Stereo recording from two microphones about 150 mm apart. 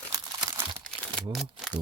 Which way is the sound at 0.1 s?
20° right (ahead or behind).